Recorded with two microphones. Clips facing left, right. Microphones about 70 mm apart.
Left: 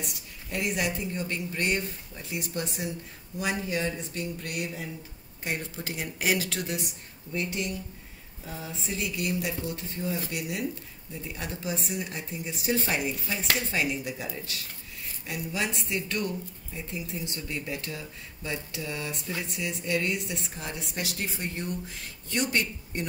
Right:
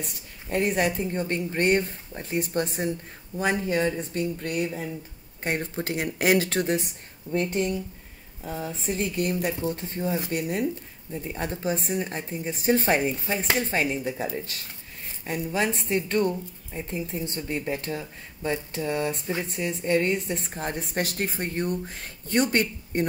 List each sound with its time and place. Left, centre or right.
0.0 s speech: right